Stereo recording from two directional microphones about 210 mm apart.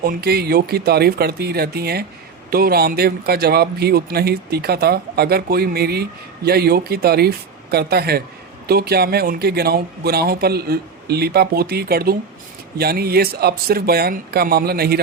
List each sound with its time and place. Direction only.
0.0 s speech: 45° right (ahead or behind)